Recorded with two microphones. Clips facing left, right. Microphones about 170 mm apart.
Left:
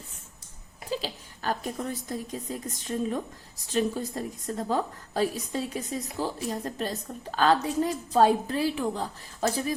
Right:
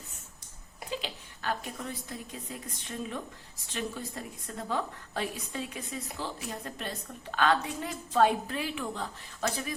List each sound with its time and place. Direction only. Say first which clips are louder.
0.9 s a woman's voice: left 5 dB; 40° left (ahead or behind)